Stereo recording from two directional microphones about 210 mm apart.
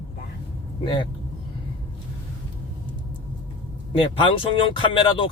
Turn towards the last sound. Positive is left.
turn(degrees=20)  # may be behind; listen again after turning